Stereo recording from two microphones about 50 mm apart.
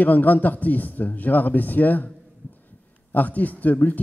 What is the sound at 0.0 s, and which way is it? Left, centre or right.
Speech, left.